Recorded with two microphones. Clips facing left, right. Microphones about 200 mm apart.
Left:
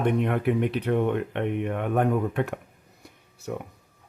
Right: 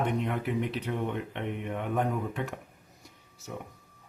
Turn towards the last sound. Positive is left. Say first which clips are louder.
# left 7 dB
turn(degrees=60)  # may be behind; listen again after turning